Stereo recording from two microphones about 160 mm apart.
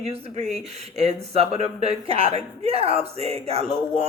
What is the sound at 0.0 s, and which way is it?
Speech, 40° right (ahead or behind).